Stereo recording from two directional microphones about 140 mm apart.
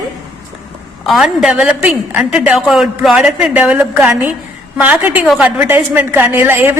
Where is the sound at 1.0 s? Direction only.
Centre (ahead or behind).